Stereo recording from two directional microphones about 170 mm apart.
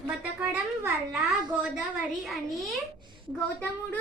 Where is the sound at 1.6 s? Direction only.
Centre (ahead or behind).